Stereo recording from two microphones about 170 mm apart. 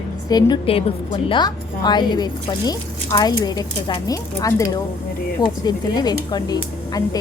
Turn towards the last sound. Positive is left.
turn(degrees=20)  # may be behind; listen again after turning